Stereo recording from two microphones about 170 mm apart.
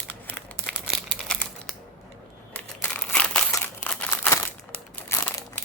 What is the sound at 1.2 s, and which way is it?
Crumpling, centre (ahead or behind).